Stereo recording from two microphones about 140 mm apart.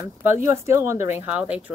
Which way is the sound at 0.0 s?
20° right (ahead or behind).